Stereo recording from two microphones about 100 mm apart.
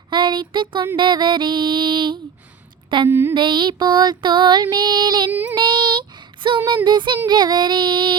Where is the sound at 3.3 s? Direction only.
55° right (ahead or behind).